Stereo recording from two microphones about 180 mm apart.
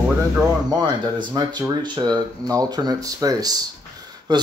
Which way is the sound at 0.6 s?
25° right (ahead or behind).